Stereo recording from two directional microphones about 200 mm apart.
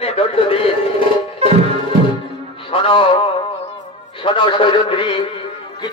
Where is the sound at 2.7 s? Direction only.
25° left (ahead or behind).